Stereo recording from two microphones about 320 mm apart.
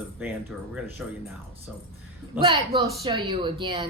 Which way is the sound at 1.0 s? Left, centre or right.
Centre.